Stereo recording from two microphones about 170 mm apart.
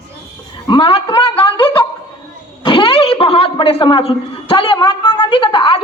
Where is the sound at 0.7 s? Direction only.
35° left (ahead or behind).